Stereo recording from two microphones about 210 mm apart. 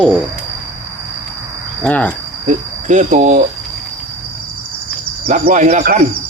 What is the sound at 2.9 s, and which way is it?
Speech, 35° right (ahead or behind).